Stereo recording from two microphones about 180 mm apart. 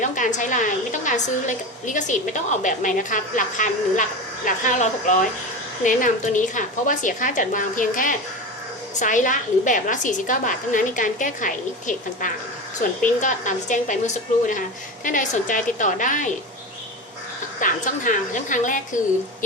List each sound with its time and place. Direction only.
0.0 s a woman's voice: 45° left (ahead or behind)
17.6 s a woman's voice: 50° left (ahead or behind)